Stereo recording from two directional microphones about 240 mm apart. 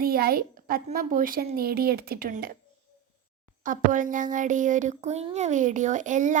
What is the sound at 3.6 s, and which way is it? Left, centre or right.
Speech, right.